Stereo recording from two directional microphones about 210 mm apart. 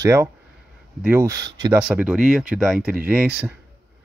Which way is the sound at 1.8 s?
5° right (ahead or behind).